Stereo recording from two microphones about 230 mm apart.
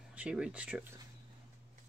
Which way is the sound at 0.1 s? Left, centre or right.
Centre.